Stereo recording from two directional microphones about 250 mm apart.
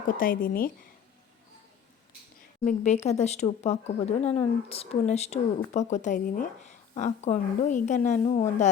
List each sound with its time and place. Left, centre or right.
0.2 s a woman's voice: left
2.6 s speech: left